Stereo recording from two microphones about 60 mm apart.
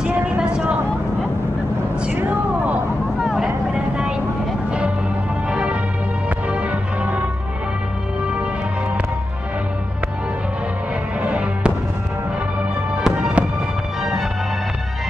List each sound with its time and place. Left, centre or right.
0.0 s speech: centre
2.1 s a sound: right
3.2 s vehicle: centre
5.5 s music: centre
11.2 s music: right
12.9 s fireworks: centre